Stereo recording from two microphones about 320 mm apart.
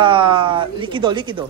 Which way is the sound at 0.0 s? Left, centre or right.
Centre.